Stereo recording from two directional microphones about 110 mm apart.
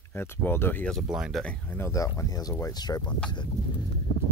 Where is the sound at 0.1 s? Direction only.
20° left (ahead or behind).